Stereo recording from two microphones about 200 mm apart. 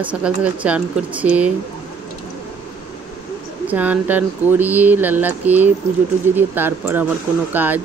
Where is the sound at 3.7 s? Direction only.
10° right (ahead or behind).